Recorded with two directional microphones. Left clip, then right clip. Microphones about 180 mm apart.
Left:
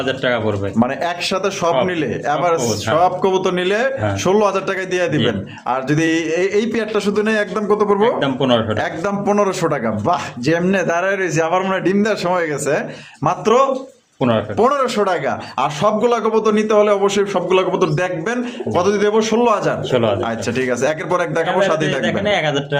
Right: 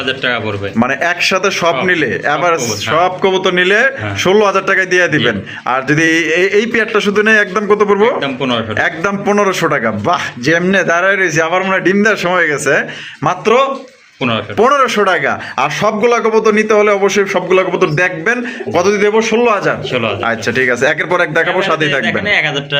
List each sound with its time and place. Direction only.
0.8 s a man's voice: 10° right (ahead or behind)
8.2 s speech: 70° left (ahead or behind)
8.8 s a man's voice: 10° right (ahead or behind)
13.2 s speech: centre (ahead or behind)
14.2 s speech: 60° left (ahead or behind)
14.6 s a man's voice: 10° right (ahead or behind)
19.9 s speech: 65° left (ahead or behind)
20.2 s a man's voice: 10° right (ahead or behind)
22.0 s speech: 70° left (ahead or behind)